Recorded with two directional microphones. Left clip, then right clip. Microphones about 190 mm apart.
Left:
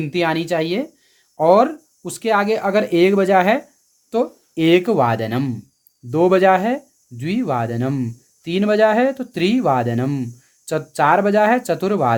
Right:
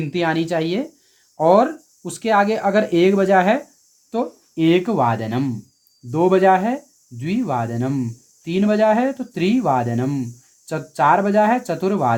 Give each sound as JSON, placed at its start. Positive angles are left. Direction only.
{"t": 0.0, "sound": "speech", "side_deg": 30}
{"t": 4.1, "sound": "speech", "side_deg": 45}